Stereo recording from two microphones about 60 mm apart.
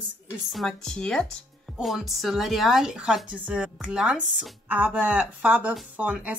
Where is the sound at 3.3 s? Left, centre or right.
Centre.